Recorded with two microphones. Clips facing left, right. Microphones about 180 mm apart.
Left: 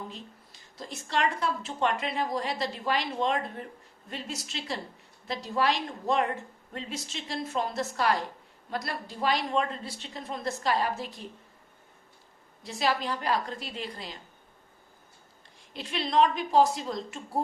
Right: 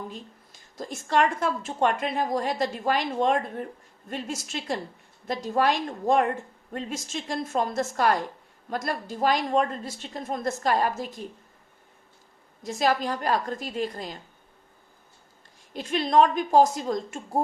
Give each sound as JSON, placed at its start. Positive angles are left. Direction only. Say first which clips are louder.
{"t": 0.1, "sound": "speech", "louder": "right 3 dB", "side_deg": -45}
{"t": 12.6, "sound": "speech", "louder": "right 4 dB", "side_deg": -45}
{"t": 15.7, "sound": "speech", "louder": "right 6 dB", "side_deg": -45}